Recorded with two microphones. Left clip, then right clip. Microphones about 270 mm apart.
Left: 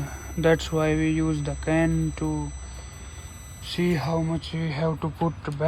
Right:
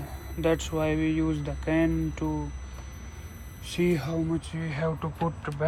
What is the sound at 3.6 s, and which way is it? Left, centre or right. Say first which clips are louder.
Speech: left 1 dB; centre.